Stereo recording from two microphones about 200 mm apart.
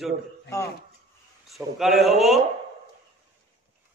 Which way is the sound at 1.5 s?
Centre (ahead or behind).